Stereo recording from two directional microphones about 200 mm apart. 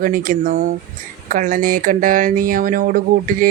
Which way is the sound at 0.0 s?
45° right (ahead or behind).